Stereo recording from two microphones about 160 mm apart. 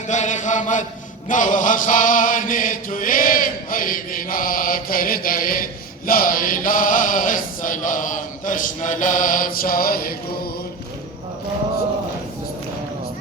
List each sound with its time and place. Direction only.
0.1 s chant: 50° left (ahead or behind); by 10.5 s 65° left (ahead or behind)